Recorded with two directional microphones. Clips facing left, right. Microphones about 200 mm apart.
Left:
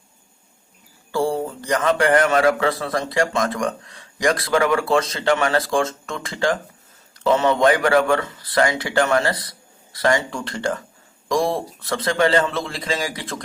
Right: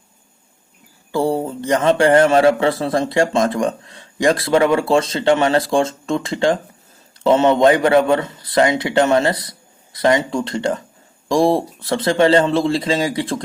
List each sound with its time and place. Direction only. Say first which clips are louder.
1.1 s a man's voice: right 3 dB; 20° right (ahead or behind)